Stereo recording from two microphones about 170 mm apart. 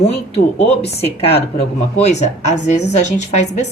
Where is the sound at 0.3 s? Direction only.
35° left (ahead or behind).